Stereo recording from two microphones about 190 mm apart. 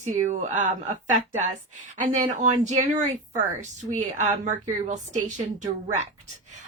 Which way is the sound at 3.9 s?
40° right (ahead or behind).